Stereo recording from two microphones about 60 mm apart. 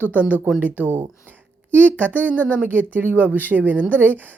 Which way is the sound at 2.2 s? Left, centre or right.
Right.